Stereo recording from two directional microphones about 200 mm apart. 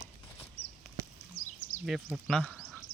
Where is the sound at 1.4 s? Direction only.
90° left.